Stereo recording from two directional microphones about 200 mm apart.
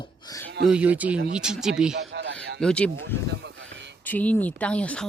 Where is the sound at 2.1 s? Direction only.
65° right (ahead or behind).